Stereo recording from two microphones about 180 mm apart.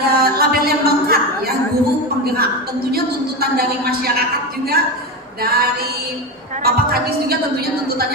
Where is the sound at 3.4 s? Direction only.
60° right (ahead or behind).